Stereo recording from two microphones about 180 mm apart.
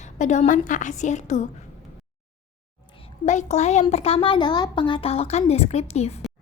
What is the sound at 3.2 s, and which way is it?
A woman's voice, 40° left (ahead or behind).